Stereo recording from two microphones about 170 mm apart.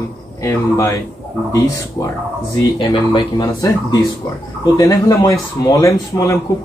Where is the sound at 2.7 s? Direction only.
30° left (ahead or behind).